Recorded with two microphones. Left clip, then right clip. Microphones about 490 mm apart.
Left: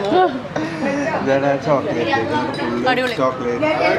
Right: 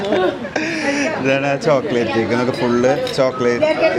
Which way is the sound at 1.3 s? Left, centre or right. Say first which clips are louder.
Right 1 dB; centre.